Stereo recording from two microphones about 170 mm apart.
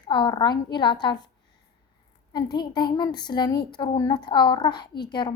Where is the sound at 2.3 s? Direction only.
25° left (ahead or behind).